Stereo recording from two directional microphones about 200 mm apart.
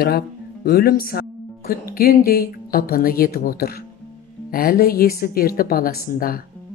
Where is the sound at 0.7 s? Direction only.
50° left (ahead or behind).